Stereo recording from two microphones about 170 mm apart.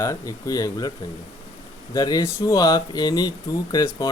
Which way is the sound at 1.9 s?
20° left (ahead or behind).